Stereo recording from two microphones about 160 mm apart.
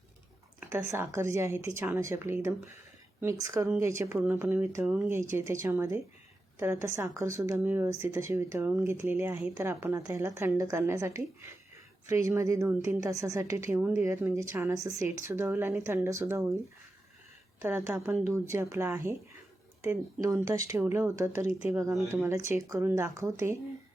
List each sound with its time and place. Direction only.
0.7 s a woman's voice: 15° right (ahead or behind)
17.6 s a woman's voice: 20° right (ahead or behind)